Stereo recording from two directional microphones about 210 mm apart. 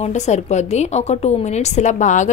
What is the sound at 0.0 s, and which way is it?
A woman's voice, 35° left (ahead or behind).